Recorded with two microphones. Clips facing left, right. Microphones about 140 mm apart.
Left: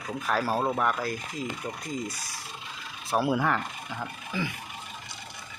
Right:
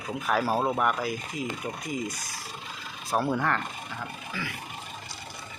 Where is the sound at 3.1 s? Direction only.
5° left (ahead or behind).